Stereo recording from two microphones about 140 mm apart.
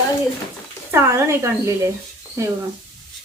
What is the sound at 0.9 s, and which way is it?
Speech, 20° right (ahead or behind).